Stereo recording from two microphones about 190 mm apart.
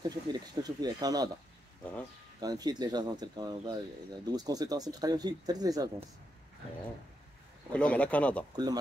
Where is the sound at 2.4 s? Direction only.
20° right (ahead or behind).